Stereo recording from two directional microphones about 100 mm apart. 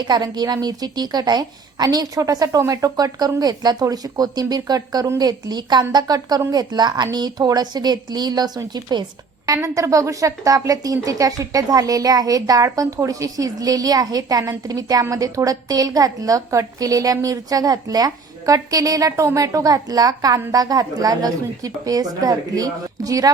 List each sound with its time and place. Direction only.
0.1 s a woman's voice: 40° right (ahead or behind)
9.6 s a woman's voice: 30° right (ahead or behind)